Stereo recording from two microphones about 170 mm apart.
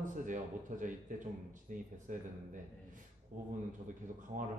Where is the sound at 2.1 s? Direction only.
50° right (ahead or behind).